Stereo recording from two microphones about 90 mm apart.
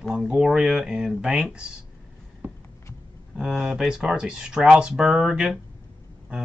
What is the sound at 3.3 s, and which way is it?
Speech, 5° right (ahead or behind).